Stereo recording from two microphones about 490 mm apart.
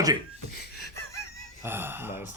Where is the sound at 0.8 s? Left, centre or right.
Left.